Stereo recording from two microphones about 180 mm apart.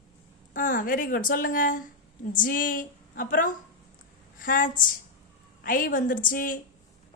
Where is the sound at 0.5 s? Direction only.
45° left (ahead or behind).